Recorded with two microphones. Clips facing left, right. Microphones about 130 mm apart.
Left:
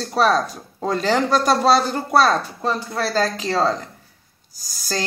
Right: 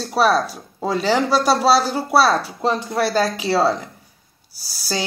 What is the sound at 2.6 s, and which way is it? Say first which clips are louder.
Speech: right 3 dB; 20° right (ahead or behind).